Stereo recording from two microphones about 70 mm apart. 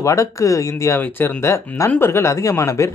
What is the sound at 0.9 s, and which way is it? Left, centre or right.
Speech, left.